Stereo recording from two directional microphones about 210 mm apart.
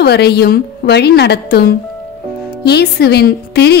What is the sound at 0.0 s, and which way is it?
A woman's voice, 50° left (ahead or behind).